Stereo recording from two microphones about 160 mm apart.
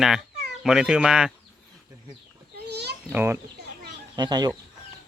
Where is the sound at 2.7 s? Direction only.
90° right.